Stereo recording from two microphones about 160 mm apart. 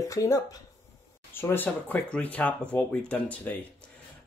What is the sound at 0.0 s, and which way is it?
Speech, 20° left (ahead or behind).